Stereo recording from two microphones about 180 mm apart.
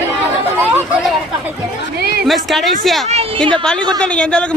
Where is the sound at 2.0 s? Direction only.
60° right (ahead or behind).